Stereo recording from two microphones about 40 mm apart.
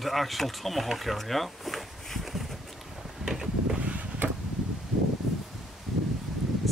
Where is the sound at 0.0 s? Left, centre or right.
Centre.